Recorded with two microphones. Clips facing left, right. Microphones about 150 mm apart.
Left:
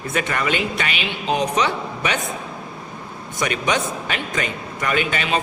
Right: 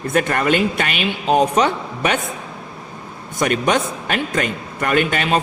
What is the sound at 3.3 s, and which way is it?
Speech, 50° right (ahead or behind).